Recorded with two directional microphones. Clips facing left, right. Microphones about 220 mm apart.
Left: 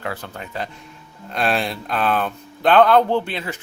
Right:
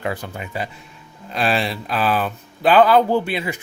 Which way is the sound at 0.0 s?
15° right (ahead or behind).